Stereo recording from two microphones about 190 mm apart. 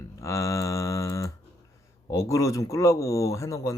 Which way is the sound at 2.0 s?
15° left (ahead or behind).